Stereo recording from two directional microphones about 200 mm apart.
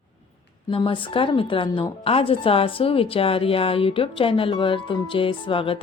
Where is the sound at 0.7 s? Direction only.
25° left (ahead or behind).